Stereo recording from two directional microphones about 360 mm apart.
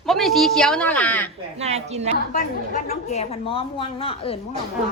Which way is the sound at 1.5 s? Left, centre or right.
Centre.